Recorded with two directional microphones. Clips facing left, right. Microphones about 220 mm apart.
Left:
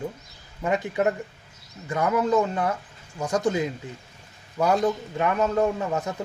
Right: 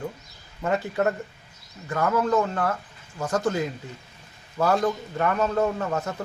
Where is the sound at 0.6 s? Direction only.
15° left (ahead or behind).